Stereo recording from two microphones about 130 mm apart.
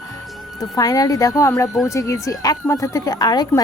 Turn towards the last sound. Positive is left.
turn(degrees=30)  # may be behind; listen again after turning